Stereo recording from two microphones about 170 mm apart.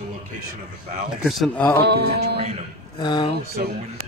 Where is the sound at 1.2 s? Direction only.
Centre (ahead or behind).